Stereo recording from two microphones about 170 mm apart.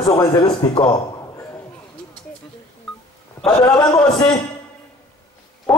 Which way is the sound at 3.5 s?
30° left (ahead or behind).